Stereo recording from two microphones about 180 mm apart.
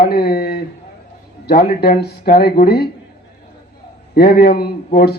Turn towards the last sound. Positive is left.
turn(degrees=65)  # may be behind; listen again after turning